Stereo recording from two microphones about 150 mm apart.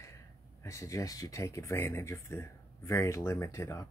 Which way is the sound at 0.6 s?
20° left (ahead or behind).